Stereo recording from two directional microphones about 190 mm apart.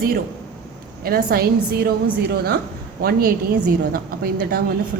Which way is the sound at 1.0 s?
50° right (ahead or behind).